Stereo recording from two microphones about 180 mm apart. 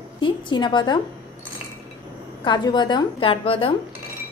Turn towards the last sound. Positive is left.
turn(degrees=30)  # may be behind; listen again after turning